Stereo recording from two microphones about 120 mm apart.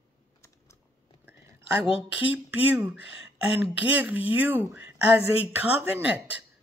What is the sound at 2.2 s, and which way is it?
Speech, 10° right (ahead or behind).